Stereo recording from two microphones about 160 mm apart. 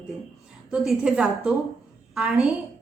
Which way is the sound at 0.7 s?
5° right (ahead or behind).